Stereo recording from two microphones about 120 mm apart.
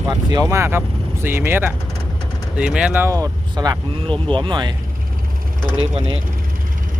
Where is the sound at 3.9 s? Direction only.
45° right (ahead or behind).